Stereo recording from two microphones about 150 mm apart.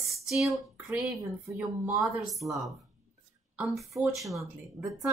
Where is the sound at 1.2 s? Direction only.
20° right (ahead or behind).